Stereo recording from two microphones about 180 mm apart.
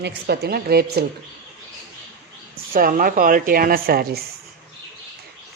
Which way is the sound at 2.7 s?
50° right (ahead or behind).